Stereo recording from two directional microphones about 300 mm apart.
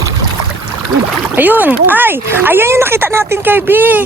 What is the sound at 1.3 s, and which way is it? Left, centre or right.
Speech, centre.